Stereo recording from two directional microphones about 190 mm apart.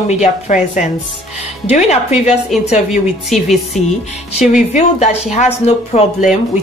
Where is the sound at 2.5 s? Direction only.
Centre (ahead or behind).